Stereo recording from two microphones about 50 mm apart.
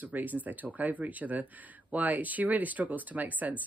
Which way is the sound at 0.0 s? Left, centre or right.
Right.